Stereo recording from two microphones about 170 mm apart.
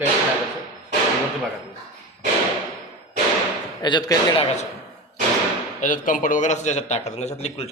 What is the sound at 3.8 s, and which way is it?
Speech, 25° left (ahead or behind).